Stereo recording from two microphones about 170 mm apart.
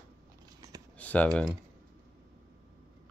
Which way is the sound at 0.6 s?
20° right (ahead or behind).